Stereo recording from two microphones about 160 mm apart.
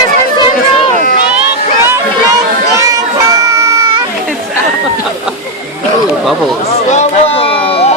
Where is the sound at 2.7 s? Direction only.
20° right (ahead or behind).